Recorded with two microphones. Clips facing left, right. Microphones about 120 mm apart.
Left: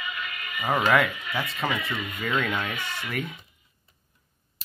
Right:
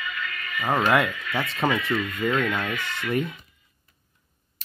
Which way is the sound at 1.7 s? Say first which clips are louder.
Right 5 dB; 20° left (ahead or behind).